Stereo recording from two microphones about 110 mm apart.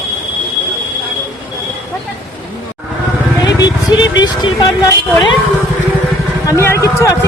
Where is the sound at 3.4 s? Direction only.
40° left (ahead or behind).